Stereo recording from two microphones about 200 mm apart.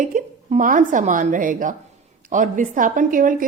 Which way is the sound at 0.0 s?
40° right (ahead or behind).